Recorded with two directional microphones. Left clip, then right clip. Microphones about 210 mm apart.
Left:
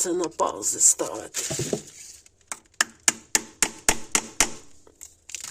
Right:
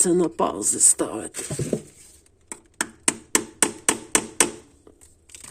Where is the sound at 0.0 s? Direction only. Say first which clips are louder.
Right 4 dB; 40° right (ahead or behind).